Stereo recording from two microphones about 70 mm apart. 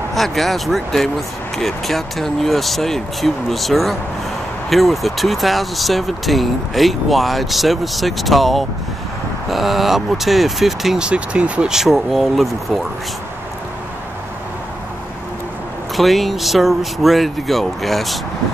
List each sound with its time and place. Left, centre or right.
0.1 s speech: centre
11.1 s speech: centre
11.7 s speech: centre
16.0 s speech: centre